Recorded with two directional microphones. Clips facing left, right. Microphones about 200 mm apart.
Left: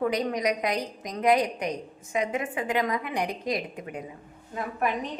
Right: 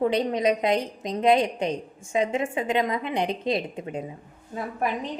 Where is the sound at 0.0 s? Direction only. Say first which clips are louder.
Right 3 dB; 25° right (ahead or behind).